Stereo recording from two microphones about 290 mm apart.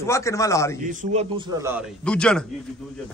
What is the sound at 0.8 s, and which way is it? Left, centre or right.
Speech, right.